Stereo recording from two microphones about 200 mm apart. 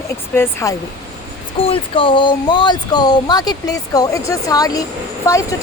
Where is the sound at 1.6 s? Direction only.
25° left (ahead or behind).